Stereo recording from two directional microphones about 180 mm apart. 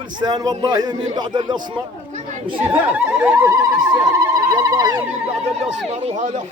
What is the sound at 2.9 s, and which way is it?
Speech, 10° right (ahead or behind).